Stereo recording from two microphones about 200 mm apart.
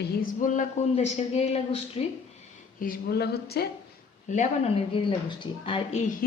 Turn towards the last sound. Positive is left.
turn(degrees=35)  # may be behind; listen again after turning